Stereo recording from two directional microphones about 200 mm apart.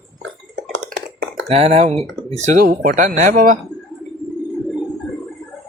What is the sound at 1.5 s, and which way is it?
Speech, 30° right (ahead or behind).